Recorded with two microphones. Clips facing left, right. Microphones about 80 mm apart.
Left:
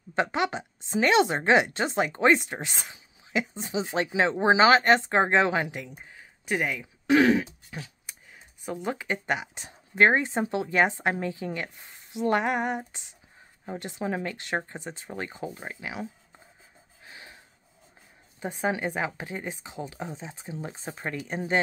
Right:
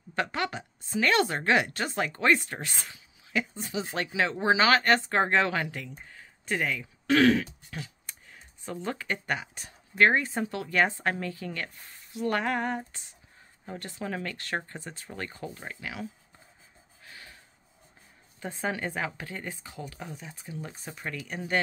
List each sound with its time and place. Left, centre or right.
0.1 s speech: left
8.1 s a sound: centre
8.6 s speech: centre
17.0 s gasp: left
18.4 s speech: centre